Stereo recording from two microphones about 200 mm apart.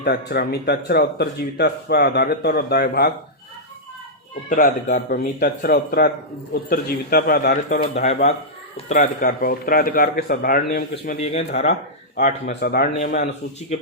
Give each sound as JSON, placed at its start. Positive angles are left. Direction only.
{"t": 0.0, "sound": "speech", "side_deg": 55}
{"t": 4.4, "sound": "speech", "side_deg": 40}
{"t": 8.9, "sound": "speech", "side_deg": 40}
{"t": 11.0, "sound": "a man's voice", "side_deg": 35}
{"t": 12.1, "sound": "speech", "side_deg": 55}
{"t": 13.0, "sound": "a man's voice", "side_deg": 40}